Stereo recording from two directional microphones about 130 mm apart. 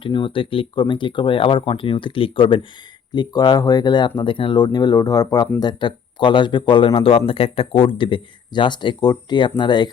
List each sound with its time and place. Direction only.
0.0 s speech: 40° left (ahead or behind)